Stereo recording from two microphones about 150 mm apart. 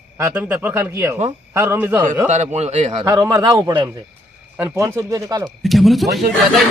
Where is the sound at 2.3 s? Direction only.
50° right (ahead or behind).